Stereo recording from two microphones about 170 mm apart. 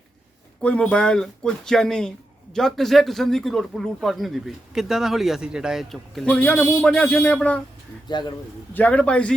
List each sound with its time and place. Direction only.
0.6 s speech: 5° left (ahead or behind)
8.0 s speech: 25° left (ahead or behind)
8.7 s a man's voice: 10° left (ahead or behind)